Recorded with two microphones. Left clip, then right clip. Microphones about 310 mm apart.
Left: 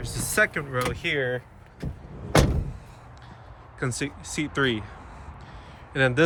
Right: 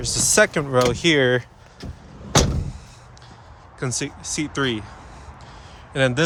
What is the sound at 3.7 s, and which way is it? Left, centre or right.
Speech, centre.